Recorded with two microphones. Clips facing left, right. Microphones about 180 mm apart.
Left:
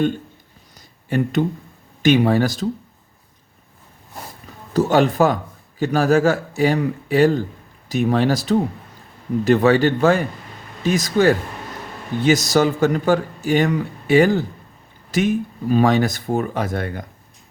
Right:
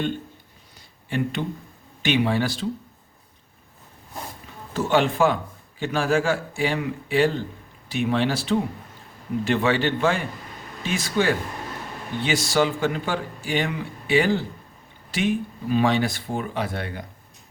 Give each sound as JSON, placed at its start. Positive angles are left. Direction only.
{"t": 1.1, "sound": "a man's voice", "side_deg": 45}
{"t": 4.7, "sound": "a man's voice", "side_deg": 40}